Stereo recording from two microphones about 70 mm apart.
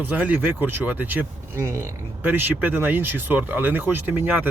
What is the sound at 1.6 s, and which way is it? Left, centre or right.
Speech, right.